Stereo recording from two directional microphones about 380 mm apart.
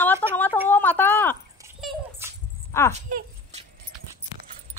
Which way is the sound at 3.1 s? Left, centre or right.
Centre.